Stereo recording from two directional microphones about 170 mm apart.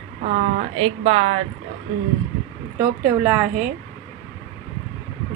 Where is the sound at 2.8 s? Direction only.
10° right (ahead or behind).